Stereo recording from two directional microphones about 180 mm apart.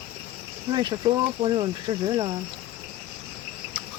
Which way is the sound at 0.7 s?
25° right (ahead or behind).